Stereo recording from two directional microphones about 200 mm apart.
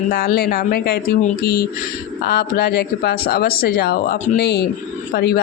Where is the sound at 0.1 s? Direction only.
50° left (ahead or behind).